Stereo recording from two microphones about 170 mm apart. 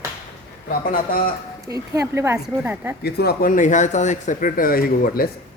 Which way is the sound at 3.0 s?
70° left (ahead or behind).